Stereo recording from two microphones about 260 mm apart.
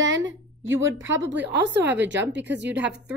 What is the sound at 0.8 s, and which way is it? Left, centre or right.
Speech, right.